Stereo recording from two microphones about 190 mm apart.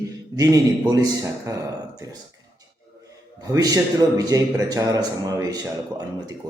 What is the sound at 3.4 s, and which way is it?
Speech, 20° right (ahead or behind).